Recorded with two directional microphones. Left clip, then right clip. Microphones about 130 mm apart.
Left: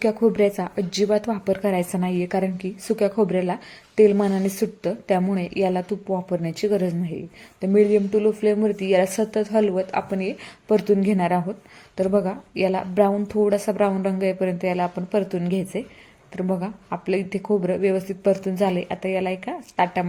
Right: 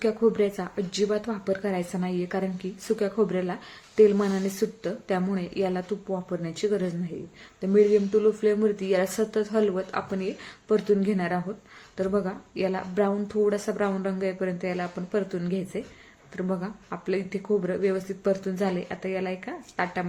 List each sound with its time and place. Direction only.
0.0 s speech: 40° left (ahead or behind)